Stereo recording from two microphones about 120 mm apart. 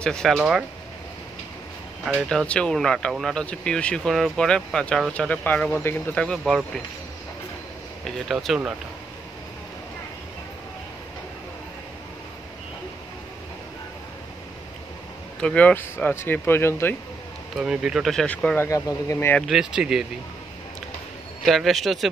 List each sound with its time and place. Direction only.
0.0 s speech: 5° left (ahead or behind)
2.2 s speech: 10° left (ahead or behind)
8.0 s speech: centre (ahead or behind)
15.4 s speech: 10° left (ahead or behind)
17.6 s speech: 5° right (ahead or behind); by 18.7 s 10° left (ahead or behind)
18.7 s speech: 25° left (ahead or behind)
19.4 s speech: 5° right (ahead or behind)
21.5 s speech: centre (ahead or behind)